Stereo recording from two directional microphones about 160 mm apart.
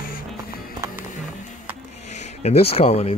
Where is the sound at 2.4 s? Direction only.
40° left (ahead or behind).